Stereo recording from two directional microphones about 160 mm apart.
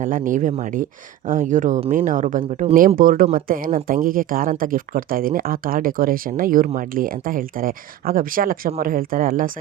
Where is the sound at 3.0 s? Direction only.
60° right (ahead or behind).